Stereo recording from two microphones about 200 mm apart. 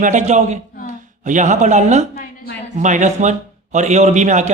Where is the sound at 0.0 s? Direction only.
35° right (ahead or behind).